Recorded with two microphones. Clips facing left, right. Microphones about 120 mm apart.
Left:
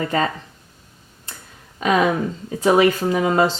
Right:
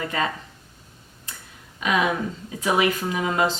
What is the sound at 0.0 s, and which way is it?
Speech, 35° left (ahead or behind).